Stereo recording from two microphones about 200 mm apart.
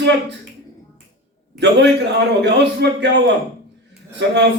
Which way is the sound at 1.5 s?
60° right (ahead or behind).